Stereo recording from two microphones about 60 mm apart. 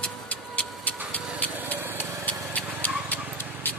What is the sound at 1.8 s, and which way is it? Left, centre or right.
Vehicle, right.